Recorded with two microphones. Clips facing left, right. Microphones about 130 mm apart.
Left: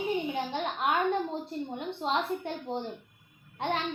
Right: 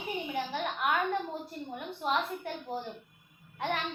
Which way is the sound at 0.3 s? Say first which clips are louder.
Left 2 dB; 25° left (ahead or behind).